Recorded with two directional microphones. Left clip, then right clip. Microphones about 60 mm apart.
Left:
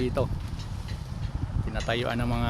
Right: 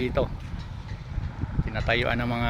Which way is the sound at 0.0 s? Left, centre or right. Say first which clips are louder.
Right 2 dB; centre.